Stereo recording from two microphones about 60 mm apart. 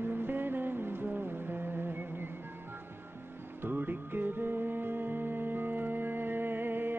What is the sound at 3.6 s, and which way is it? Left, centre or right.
Music, right.